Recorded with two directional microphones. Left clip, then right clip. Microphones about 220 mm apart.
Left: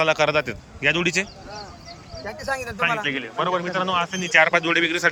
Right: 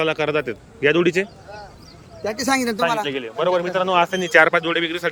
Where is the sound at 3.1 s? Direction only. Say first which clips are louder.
Right 3 dB; 25° right (ahead or behind).